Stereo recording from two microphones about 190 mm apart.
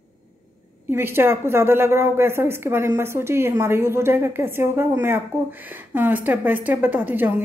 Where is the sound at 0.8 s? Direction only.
10° right (ahead or behind).